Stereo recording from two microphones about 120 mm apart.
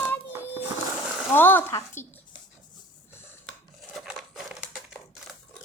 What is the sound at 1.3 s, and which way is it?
Speech, 15° left (ahead or behind).